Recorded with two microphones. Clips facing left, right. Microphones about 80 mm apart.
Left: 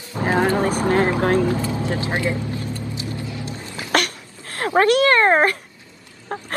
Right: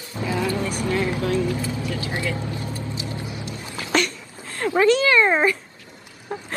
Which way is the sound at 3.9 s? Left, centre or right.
Left.